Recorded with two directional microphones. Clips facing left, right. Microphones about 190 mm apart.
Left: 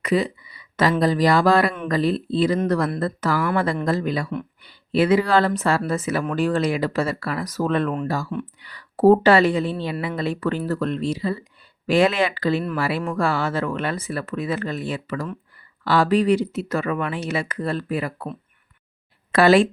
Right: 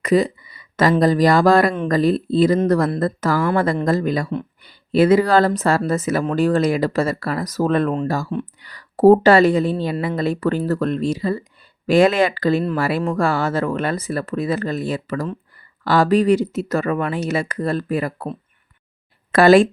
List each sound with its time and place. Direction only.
0.0 s speech: 45° right (ahead or behind)
19.3 s speech: 45° right (ahead or behind)